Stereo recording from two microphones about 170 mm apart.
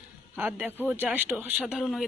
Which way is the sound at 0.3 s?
10° right (ahead or behind).